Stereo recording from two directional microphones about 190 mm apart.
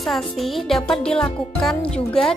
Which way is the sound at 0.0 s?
Centre (ahead or behind).